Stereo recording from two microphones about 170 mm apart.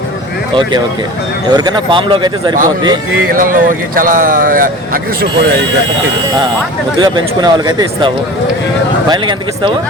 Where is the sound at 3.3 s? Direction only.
55° right (ahead or behind).